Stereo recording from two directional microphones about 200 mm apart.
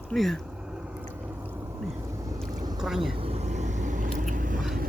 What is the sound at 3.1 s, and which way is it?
Biting, 30° right (ahead or behind).